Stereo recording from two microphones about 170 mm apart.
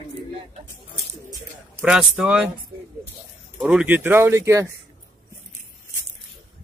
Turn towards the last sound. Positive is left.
turn(degrees=-15)  # may be behind; listen again after turning